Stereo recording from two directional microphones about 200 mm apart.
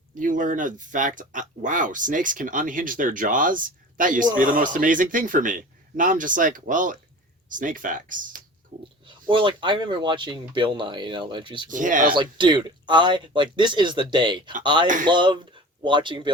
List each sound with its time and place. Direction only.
0.1 s speech: 40° right (ahead or behind)
9.0 s speech: 25° right (ahead or behind)
11.7 s speech: 40° right (ahead or behind)
12.1 s speech: 25° right (ahead or behind)